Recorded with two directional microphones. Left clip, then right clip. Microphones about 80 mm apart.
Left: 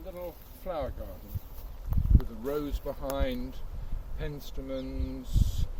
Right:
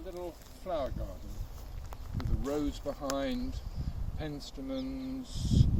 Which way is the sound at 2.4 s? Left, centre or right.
Left.